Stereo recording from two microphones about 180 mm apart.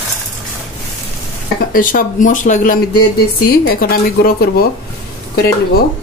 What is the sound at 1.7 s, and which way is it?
Speech, 50° left (ahead or behind).